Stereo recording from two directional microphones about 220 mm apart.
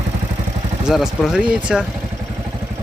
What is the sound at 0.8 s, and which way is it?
Speech, centre (ahead or behind).